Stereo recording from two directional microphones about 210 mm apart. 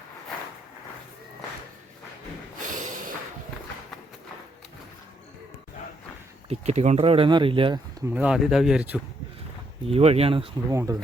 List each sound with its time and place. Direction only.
2.6 s snort: 40° right (ahead or behind)
6.5 s speech: 30° right (ahead or behind)
8.1 s speech: 5° right (ahead or behind)
9.8 s speech: 30° right (ahead or behind)
10.7 s speech: 15° right (ahead or behind)